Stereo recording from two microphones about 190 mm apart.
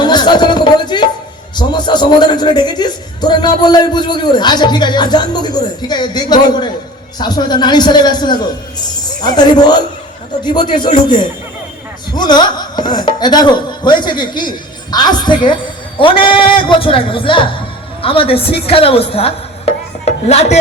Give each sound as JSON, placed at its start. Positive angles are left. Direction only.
{"t": 0.0, "sound": "music", "side_deg": 20}
{"t": 1.5, "sound": "a man's voice", "side_deg": 25}
{"t": 12.1, "sound": "a man's voice", "side_deg": 20}